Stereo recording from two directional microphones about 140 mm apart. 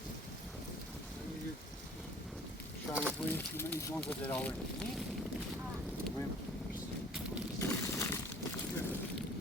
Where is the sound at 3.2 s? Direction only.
15° left (ahead or behind).